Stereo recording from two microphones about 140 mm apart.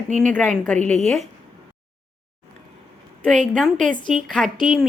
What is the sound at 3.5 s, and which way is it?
Speech, 5° left (ahead or behind).